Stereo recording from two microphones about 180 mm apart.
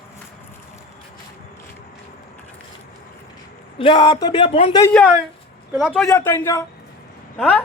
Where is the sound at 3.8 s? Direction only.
25° left (ahead or behind).